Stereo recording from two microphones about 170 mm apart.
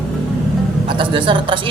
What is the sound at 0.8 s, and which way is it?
Speech, 30° right (ahead or behind).